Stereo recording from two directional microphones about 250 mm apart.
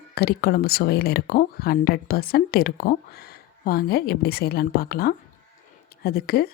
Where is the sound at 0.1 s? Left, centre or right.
Left.